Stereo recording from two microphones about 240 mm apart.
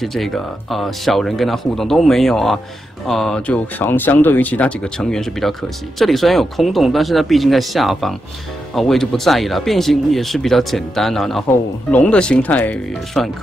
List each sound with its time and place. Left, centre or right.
0.0 s speech: centre